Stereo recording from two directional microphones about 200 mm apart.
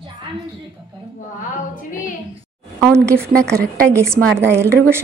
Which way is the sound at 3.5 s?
50° right (ahead or behind).